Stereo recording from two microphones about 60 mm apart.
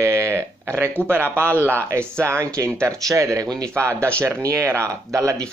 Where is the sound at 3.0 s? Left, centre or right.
Right.